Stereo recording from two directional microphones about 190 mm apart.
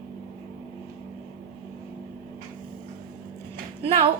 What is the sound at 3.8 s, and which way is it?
Speech, 30° right (ahead or behind).